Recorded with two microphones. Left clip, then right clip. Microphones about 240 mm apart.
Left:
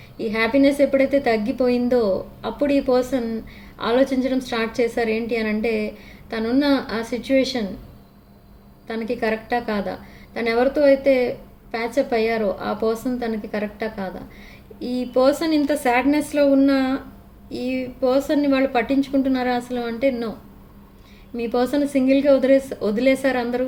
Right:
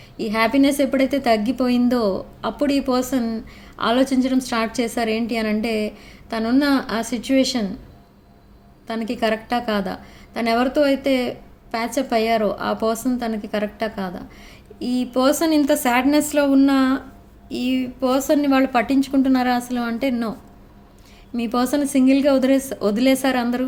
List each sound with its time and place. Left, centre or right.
0.2 s a woman's voice: right
8.9 s a woman's voice: right
21.3 s a woman's voice: right